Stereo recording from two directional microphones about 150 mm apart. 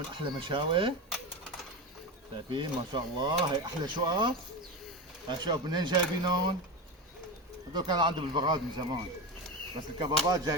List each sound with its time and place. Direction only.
0.1 s speech: 35° right (ahead or behind)
2.5 s speech: 35° right (ahead or behind)
5.4 s speech: 30° right (ahead or behind)
7.7 s speech: 30° right (ahead or behind)
10.0 s speech: 25° right (ahead or behind)